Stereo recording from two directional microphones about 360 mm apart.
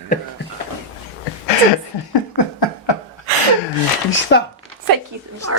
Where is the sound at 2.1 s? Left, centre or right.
Left.